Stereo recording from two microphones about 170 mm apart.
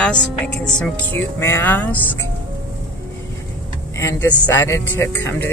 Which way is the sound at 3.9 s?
15° left (ahead or behind).